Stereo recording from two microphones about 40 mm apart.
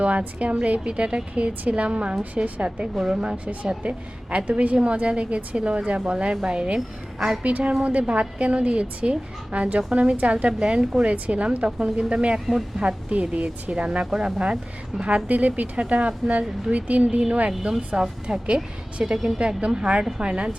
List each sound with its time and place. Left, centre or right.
0.0 s a woman's voice: right
2.6 s a woman's voice: right
7.4 s a woman's voice: right
14.1 s a woman's voice: right
15.0 s a woman's voice: right
17.6 s a woman's voice: right